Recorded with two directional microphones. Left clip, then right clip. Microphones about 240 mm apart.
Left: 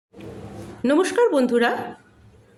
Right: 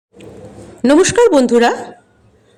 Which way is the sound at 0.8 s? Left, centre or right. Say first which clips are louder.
Right 8 dB; right.